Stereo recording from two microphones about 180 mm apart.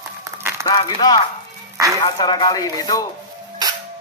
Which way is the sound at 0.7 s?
20° left (ahead or behind).